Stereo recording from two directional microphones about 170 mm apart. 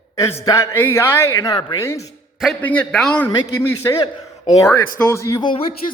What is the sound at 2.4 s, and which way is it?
Speech, 5° left (ahead or behind).